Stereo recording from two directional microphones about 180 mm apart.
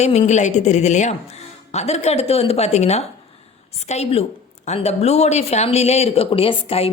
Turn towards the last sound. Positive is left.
turn(degrees=30)  # may be behind; listen again after turning